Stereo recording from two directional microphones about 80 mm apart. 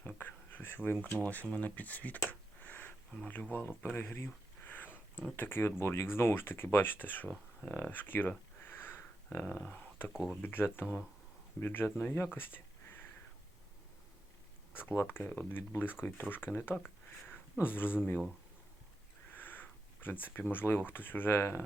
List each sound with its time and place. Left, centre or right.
0.0 s a sound: left
1.0 s speech: centre
2.6 s a sound: left
3.2 s speech: centre
3.8 s a sound: left
5.4 s speech: left
10.1 s speech: centre
10.4 s speech: left
12.2 s a sound: left
14.8 s speech: left
19.4 s sniff: left
20.1 s speech: left